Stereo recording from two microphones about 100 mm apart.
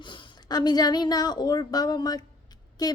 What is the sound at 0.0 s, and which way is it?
A woman's voice, 50° left (ahead or behind).